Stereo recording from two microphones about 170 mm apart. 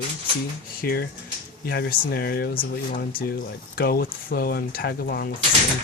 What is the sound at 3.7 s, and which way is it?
Speech, 60° left (ahead or behind).